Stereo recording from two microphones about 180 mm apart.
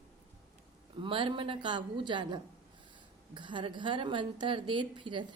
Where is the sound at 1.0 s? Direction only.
25° right (ahead or behind).